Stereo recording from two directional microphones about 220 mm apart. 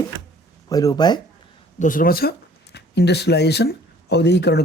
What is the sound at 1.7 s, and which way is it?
Speech, 35° left (ahead or behind).